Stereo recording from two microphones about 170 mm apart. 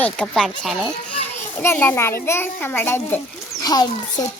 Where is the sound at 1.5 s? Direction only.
10° left (ahead or behind).